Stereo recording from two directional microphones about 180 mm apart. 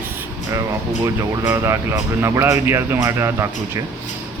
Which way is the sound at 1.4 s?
15° right (ahead or behind).